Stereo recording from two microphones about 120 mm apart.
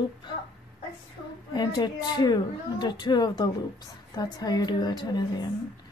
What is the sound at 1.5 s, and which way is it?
Speech, 35° left (ahead or behind).